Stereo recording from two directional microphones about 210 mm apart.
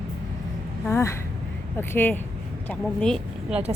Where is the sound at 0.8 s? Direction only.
10° left (ahead or behind).